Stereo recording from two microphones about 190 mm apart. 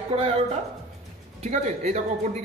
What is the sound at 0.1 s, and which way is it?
A man's voice, 30° right (ahead or behind).